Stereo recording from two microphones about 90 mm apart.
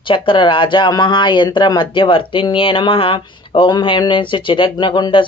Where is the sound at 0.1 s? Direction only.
70° left (ahead or behind); by 3.7 s 85° left.